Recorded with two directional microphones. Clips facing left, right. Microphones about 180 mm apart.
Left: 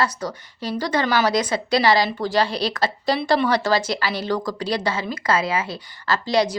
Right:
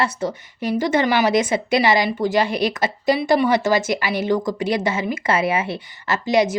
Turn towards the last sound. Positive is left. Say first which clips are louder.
# right 2 dB
turn(degrees=-20)  # may be behind; listen again after turning